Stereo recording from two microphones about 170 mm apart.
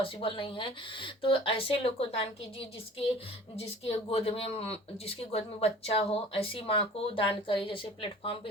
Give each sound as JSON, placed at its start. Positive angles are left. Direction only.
{"t": 0.0, "sound": "speech", "side_deg": 30}